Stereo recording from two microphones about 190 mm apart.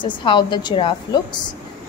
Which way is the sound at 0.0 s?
25° left (ahead or behind).